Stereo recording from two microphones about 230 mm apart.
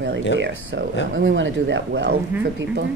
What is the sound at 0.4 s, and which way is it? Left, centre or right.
Speech, right.